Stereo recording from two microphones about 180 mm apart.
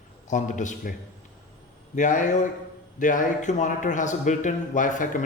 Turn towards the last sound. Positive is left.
turn(degrees=45)  # may be behind; listen again after turning